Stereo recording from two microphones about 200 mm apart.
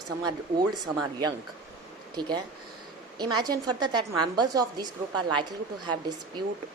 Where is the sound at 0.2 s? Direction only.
20° right (ahead or behind).